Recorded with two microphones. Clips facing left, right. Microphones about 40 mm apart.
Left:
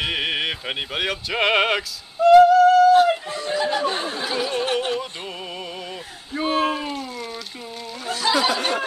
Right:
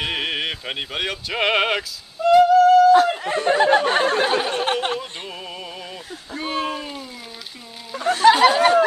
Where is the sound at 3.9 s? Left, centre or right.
Right.